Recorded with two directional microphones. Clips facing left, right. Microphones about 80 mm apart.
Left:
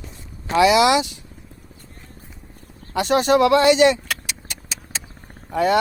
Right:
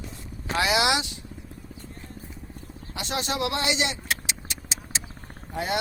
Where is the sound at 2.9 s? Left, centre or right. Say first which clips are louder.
Left 13 dB; left.